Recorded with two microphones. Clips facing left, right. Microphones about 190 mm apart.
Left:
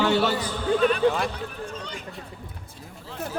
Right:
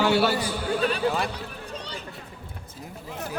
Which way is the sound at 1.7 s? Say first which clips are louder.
Left 1 dB; 35° right (ahead or behind).